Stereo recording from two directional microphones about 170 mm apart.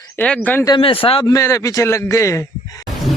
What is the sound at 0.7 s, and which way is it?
Speech, 35° left (ahead or behind).